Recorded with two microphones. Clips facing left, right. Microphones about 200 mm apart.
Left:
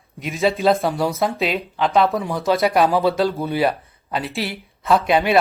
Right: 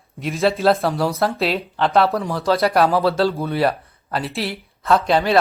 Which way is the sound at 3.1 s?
15° left (ahead or behind).